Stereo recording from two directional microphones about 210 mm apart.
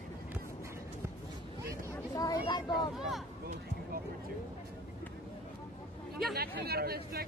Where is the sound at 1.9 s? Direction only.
15° left (ahead or behind).